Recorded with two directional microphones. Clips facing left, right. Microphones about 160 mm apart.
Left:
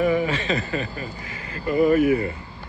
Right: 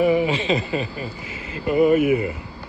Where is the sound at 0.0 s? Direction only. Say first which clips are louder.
Right 3 dB; 15° right (ahead or behind).